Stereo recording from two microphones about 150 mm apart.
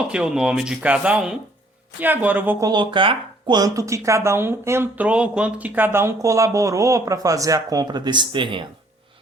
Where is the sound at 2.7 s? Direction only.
30° right (ahead or behind).